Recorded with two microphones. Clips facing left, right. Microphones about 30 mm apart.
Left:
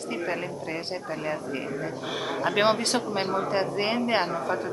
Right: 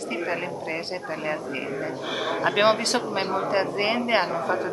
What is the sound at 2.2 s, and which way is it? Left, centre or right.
A man's voice, centre.